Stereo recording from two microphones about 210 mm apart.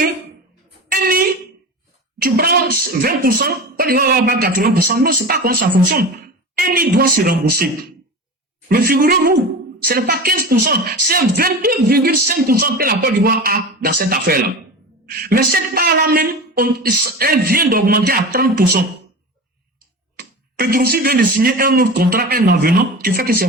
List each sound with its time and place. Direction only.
0.9 s a sound: 45° right (ahead or behind)
3.0 s a man's voice: 45° right (ahead or behind)
8.7 s a man's voice: 45° right (ahead or behind)
20.1 s a man's voice: 45° right (ahead or behind)